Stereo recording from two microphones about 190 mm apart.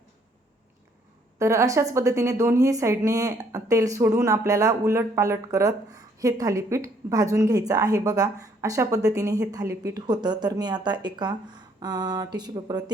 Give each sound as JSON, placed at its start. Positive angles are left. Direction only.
{"t": 1.4, "sound": "speech", "side_deg": -15}